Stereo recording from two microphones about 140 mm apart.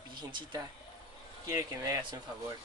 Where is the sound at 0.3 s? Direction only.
30° right (ahead or behind).